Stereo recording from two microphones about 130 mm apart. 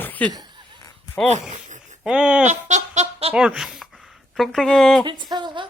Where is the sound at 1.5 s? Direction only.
70° right (ahead or behind).